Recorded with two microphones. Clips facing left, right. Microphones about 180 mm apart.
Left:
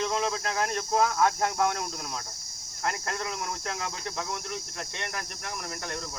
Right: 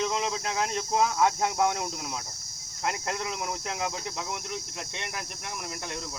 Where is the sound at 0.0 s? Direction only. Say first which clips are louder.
Even; 20° right (ahead or behind).